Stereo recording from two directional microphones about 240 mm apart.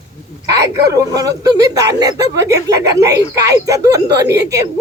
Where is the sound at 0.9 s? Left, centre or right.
Centre.